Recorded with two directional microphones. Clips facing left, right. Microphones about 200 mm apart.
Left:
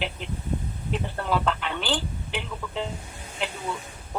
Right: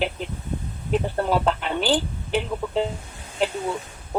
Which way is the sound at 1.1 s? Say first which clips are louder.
Right 2 dB; 40° right (ahead or behind).